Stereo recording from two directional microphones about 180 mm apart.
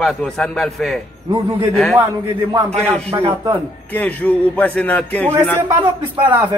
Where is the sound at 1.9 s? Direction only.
10° right (ahead or behind).